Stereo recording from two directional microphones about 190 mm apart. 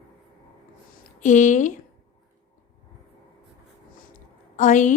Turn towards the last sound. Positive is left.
turn(degrees=40)  # may be behind; listen again after turning